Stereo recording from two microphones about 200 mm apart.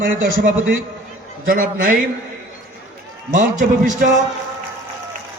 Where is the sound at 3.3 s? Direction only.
40° right (ahead or behind).